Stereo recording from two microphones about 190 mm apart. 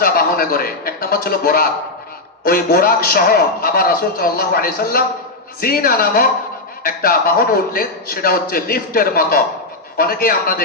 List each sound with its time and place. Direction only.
0.0 s a man's voice: 50° left (ahead or behind)